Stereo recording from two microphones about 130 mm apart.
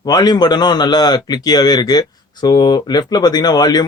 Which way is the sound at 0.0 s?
30° left (ahead or behind).